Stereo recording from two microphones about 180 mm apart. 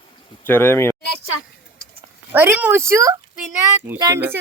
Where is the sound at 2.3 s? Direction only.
10° right (ahead or behind).